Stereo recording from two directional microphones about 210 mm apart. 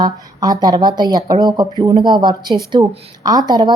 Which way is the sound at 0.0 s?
20° right (ahead or behind).